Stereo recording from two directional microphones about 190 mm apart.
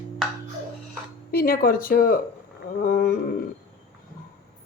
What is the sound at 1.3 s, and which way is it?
Speech, 50° left (ahead or behind).